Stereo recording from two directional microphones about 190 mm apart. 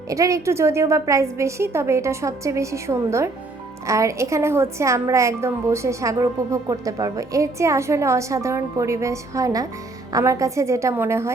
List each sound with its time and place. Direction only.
0.1 s a woman's voice: 15° right (ahead or behind)